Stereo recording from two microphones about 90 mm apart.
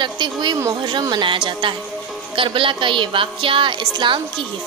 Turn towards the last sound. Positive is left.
turn(degrees=-60)  # may be behind; listen again after turning